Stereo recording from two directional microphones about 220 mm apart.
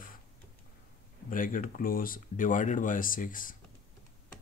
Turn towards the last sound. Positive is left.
turn(degrees=40)  # may be behind; listen again after turning